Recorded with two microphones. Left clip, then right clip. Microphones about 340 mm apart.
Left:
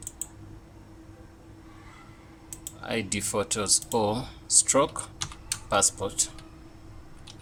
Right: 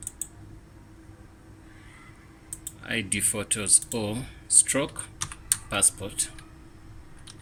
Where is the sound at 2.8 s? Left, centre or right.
Centre.